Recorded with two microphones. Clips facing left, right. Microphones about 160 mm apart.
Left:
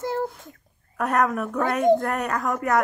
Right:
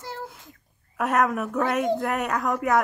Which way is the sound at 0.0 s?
50° left (ahead or behind).